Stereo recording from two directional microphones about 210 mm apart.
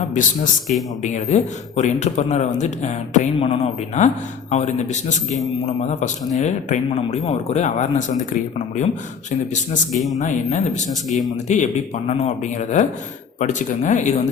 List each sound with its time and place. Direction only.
1.0 s speech: 35° left (ahead or behind)
9.9 s speech: centre (ahead or behind)
10.2 s speech: 35° left (ahead or behind)